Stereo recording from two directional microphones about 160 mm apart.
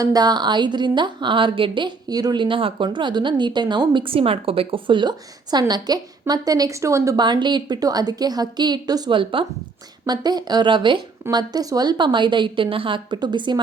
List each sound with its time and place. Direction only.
0.0 s a woman's voice: 25° right (ahead or behind)